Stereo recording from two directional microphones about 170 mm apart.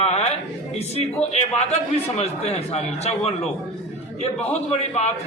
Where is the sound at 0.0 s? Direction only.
40° left (ahead or behind).